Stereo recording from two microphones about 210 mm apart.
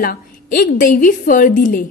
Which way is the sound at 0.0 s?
45° left (ahead or behind).